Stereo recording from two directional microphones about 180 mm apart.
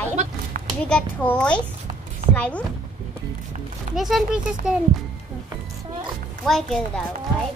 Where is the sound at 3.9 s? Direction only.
Centre (ahead or behind).